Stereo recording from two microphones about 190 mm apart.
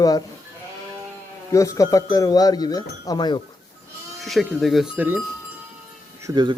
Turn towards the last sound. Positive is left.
turn(degrees=-20)  # may be behind; listen again after turning